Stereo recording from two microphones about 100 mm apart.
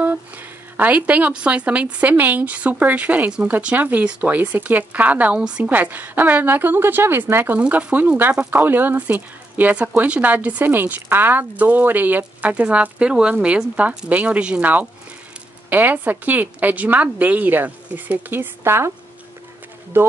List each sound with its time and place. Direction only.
0.0 s a woman's voice: 15° right (ahead or behind)